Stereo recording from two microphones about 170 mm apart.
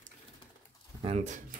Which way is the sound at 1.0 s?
35° right (ahead or behind).